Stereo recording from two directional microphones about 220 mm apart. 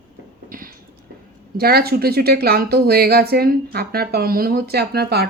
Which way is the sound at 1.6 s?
45° right (ahead or behind).